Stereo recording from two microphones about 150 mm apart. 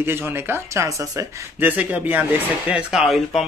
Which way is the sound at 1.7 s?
10° right (ahead or behind).